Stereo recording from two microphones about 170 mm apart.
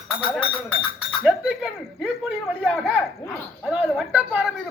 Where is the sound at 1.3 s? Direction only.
5° right (ahead or behind).